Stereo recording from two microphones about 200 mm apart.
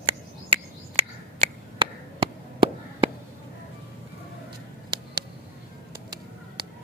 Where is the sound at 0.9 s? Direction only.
30° right (ahead or behind).